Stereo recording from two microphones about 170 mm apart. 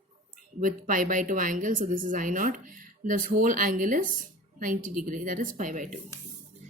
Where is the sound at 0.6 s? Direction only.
50° right (ahead or behind).